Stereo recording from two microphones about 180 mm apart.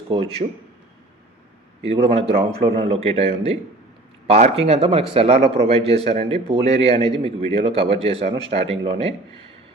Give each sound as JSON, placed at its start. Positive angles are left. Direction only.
{"t": 0.1, "sound": "a man's voice", "side_deg": -30}
{"t": 1.8, "sound": "speech", "side_deg": -30}